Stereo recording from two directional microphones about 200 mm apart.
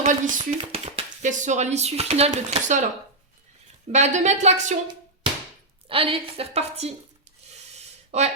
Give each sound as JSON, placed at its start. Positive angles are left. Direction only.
{"t": 0.0, "sound": "speech", "side_deg": -40}
{"t": 3.9, "sound": "speech", "side_deg": -35}
{"t": 5.9, "sound": "a woman's voice", "side_deg": -30}
{"t": 7.5, "sound": "a sound", "side_deg": -35}